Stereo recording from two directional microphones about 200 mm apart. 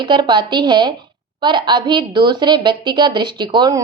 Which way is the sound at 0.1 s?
25° right (ahead or behind).